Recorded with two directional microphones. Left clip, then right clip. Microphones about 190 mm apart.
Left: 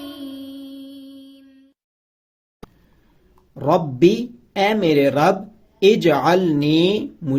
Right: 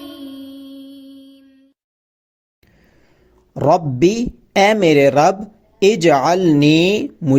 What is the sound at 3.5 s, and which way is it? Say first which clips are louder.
Speech: right 4 dB; 40° right (ahead or behind).